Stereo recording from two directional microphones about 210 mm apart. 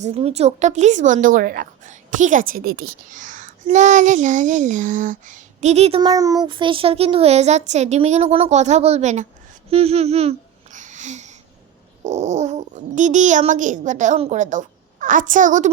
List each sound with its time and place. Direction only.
0.0 s a woman's voice: 30° right (ahead or behind)
9.6 s a sound: 30° right (ahead or behind)
12.0 s a woman's voice: 35° right (ahead or behind)